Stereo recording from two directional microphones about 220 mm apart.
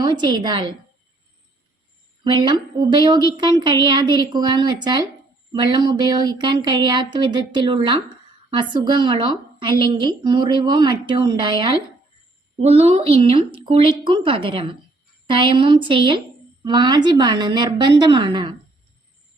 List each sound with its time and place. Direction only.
0.2 s a woman's voice: 20° right (ahead or behind)
2.2 s a woman's voice: 20° right (ahead or behind)